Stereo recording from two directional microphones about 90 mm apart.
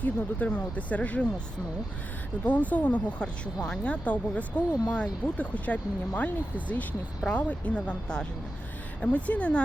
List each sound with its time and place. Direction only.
0.0 s speech: 15° left (ahead or behind)
2.4 s speech: 15° left (ahead or behind)